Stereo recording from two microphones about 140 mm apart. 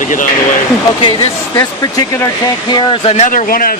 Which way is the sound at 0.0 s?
65° left (ahead or behind).